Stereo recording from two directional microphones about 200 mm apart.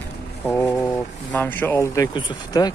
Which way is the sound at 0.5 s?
10° left (ahead or behind).